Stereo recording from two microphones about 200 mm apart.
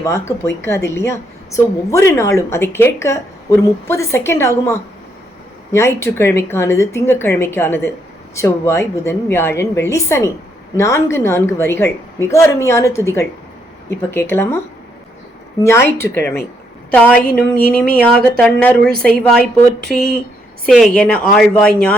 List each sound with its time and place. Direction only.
0.0 s a woman's voice: 15° left (ahead or behind)
16.0 s a woman's voice: 10° left (ahead or behind)
19.8 s speech: 55° right (ahead or behind)
20.7 s a woman's voice: centre (ahead or behind)